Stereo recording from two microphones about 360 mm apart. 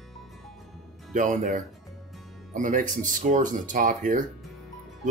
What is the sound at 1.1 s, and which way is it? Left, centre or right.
Speech, centre.